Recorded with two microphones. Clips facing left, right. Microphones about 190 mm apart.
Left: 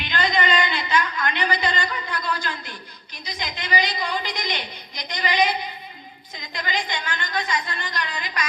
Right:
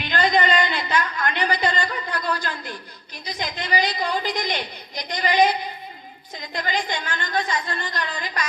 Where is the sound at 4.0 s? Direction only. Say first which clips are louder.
Right 3 dB; 45° right (ahead or behind).